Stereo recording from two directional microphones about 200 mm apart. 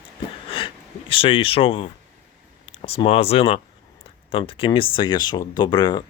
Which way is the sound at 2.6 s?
30° left (ahead or behind).